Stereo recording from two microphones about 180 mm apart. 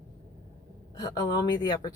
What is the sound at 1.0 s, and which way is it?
Speech, 20° left (ahead or behind).